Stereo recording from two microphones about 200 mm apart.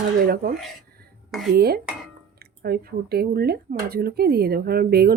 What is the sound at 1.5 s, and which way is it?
Speech, 50° right (ahead or behind).